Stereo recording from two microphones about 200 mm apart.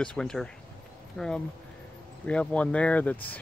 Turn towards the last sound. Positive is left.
turn(degrees=5)  # may be behind; listen again after turning